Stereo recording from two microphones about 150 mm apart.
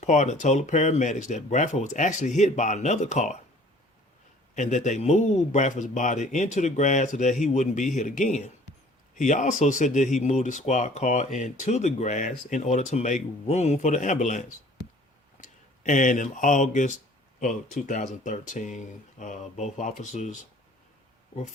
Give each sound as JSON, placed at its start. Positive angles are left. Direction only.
{"t": 0.0, "sound": "speech", "side_deg": 55}
{"t": 4.5, "sound": "speech", "side_deg": 50}